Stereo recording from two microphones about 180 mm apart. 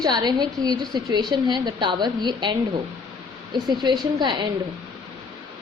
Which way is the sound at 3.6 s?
25° right (ahead or behind).